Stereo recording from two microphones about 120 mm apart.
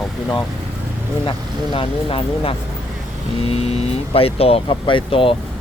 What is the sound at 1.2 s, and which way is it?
Speech, 45° left (ahead or behind).